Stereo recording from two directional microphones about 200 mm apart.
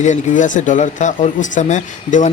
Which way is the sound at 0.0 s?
40° left (ahead or behind).